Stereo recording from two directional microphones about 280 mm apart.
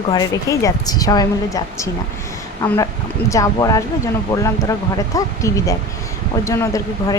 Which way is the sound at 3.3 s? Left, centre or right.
Centre.